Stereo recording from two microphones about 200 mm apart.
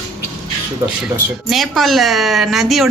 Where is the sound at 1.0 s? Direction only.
Centre (ahead or behind).